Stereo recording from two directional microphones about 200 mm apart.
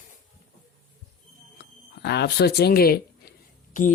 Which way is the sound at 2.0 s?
55° left (ahead or behind).